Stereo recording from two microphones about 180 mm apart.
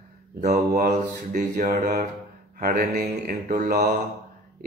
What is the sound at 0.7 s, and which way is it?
Speech, 65° right (ahead or behind).